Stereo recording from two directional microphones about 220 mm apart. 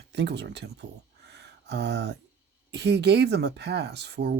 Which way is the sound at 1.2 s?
50° right (ahead or behind).